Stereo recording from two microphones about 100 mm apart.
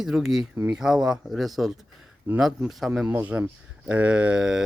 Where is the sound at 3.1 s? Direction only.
20° right (ahead or behind).